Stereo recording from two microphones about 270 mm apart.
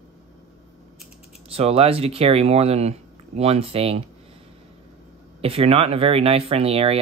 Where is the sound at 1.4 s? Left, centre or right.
Right.